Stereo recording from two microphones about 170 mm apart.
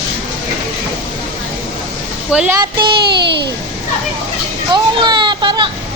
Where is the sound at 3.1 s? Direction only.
80° right.